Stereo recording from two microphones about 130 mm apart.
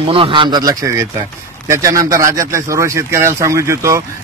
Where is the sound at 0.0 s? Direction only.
45° right (ahead or behind).